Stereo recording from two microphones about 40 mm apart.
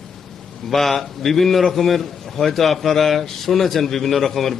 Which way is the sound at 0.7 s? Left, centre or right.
Centre.